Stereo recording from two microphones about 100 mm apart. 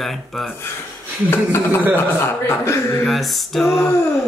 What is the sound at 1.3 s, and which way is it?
A man's voice, 25° left (ahead or behind).